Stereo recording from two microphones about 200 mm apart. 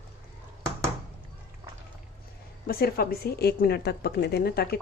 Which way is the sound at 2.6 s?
50° left (ahead or behind).